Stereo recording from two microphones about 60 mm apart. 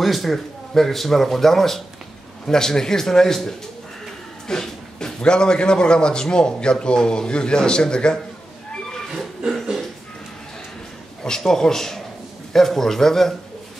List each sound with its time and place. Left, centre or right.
0.0 s a man's voice: centre
9.5 s a sound: centre
11.2 s a man's voice: centre